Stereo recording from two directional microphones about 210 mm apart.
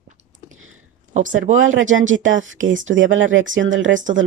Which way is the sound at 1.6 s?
70° right (ahead or behind).